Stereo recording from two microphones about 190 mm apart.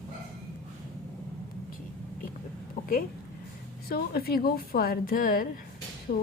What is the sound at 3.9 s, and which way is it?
Speech, 55° left (ahead or behind).